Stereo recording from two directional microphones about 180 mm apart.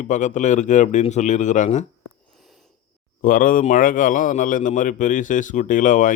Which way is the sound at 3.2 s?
50° left (ahead or behind).